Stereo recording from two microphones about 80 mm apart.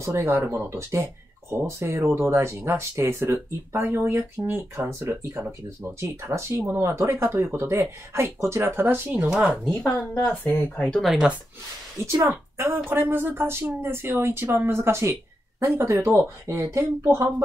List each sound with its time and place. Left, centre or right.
0.0 s a woman's voice: right
10.4 s speech: left
10.9 s speech: centre
12.0 s a woman's voice: right